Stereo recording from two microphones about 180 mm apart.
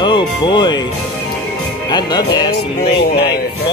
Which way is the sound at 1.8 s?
25° left (ahead or behind).